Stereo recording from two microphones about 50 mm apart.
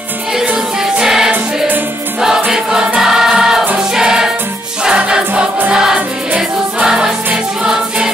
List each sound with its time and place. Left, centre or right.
1.0 s music: centre
2.5 s music: centre
3.0 s choir: centre
4.8 s music: centre